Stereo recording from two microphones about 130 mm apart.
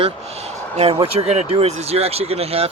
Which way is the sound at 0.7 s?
55° right (ahead or behind).